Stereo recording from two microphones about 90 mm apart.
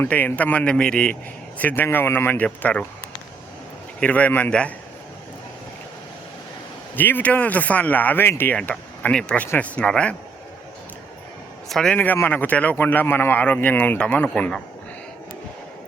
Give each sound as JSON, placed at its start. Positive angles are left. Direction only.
{"t": 0.0, "sound": "speech", "side_deg": 20}
{"t": 4.0, "sound": "speech", "side_deg": 15}
{"t": 6.9, "sound": "speech", "side_deg": 20}
{"t": 8.5, "sound": "speech", "side_deg": 10}
{"t": 11.7, "sound": "a man's voice", "side_deg": 5}
{"t": 11.9, "sound": "speech", "side_deg": 25}